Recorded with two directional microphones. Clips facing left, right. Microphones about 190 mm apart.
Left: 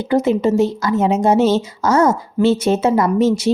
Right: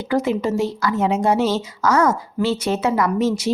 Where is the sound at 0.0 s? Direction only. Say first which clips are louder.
Left 5 dB; 25° left (ahead or behind).